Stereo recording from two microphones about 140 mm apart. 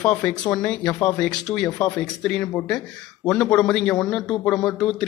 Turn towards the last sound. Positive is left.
turn(degrees=5)  # may be behind; listen again after turning